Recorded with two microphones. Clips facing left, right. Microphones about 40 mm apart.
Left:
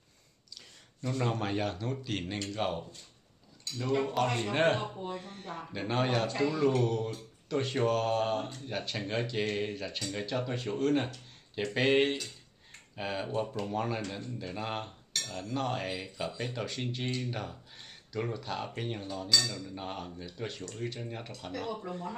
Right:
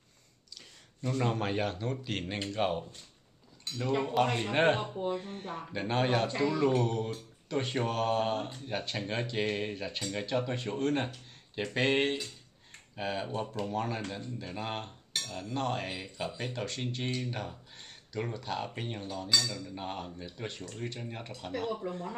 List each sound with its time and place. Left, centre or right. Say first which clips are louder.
0.6 s speech: right 1 dB; centre
3.8 s speech: right 1 dB; centre
9.9 s speech: right 1 dB; centre
10.2 s speech: right 2 dB; centre
21.4 s speech: right 3 dB; centre
21.7 s speech: right 1 dB; centre